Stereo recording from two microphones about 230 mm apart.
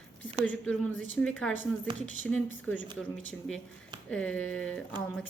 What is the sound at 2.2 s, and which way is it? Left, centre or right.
Speech, centre.